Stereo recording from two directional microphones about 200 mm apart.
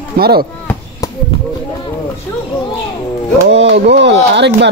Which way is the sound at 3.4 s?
65° right (ahead or behind).